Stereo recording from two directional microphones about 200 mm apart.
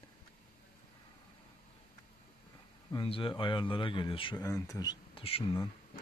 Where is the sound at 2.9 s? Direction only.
25° left (ahead or behind).